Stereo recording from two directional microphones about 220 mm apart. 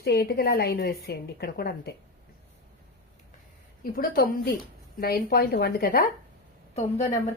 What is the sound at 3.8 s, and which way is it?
A woman's voice, 40° left (ahead or behind).